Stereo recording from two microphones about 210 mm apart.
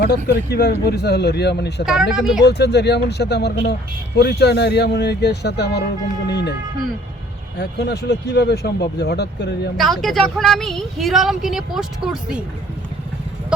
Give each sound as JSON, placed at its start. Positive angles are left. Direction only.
{"t": 0.0, "sound": "speech", "side_deg": 50}
{"t": 1.8, "sound": "speech", "side_deg": 0}
{"t": 2.4, "sound": "speech", "side_deg": 55}
{"t": 7.6, "sound": "speech", "side_deg": 55}
{"t": 9.7, "sound": "speech", "side_deg": 0}